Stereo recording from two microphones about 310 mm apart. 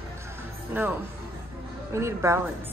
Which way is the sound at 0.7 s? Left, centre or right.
Centre.